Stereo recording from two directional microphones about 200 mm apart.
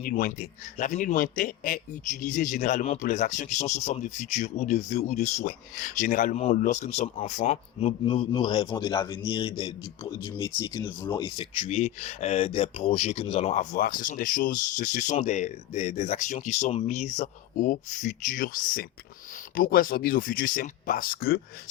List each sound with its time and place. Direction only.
0.0 s a man's voice: 45° left (ahead or behind)